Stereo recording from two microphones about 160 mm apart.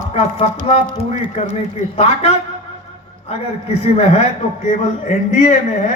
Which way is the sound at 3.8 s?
40° left (ahead or behind).